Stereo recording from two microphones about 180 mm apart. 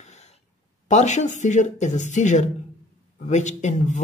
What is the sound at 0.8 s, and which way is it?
Speech, 40° left (ahead or behind).